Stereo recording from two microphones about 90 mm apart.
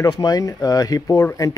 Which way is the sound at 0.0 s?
45° left (ahead or behind).